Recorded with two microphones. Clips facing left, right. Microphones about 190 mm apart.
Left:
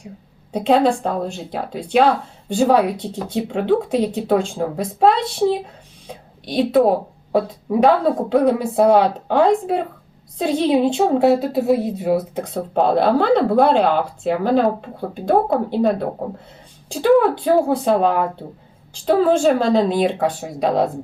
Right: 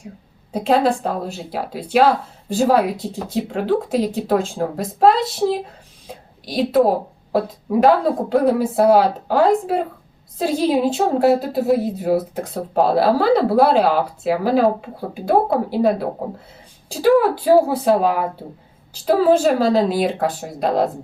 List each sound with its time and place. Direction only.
0.5 s a woman's voice: centre (ahead or behind)